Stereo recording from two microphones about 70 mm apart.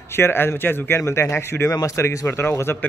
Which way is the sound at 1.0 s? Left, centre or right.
Left.